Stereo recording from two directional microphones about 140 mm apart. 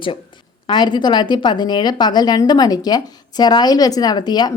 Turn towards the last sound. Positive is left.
turn(degrees=30)  # may be behind; listen again after turning